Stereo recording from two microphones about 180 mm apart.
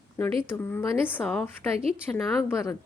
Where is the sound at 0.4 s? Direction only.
10° left (ahead or behind).